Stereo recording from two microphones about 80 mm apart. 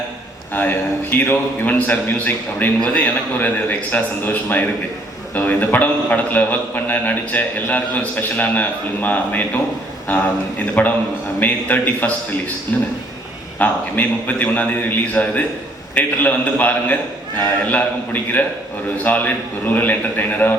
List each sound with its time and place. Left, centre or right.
0.5 s a man's voice: left
11.3 s a man's voice: left